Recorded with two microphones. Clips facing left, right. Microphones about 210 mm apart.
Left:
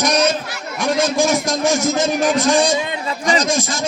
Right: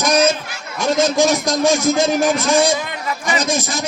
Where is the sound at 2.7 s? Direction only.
25° left (ahead or behind).